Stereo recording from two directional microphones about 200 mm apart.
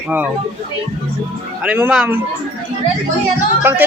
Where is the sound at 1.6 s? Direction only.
5° right (ahead or behind).